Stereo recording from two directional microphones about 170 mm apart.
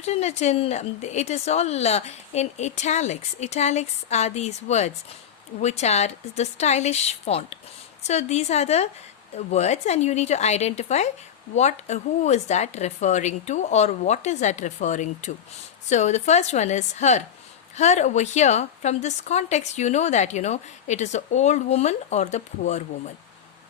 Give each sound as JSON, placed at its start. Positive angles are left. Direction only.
{"t": 0.0, "sound": "a woman's voice", "side_deg": 40}